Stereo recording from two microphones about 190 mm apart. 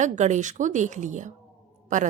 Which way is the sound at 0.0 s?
40° right (ahead or behind).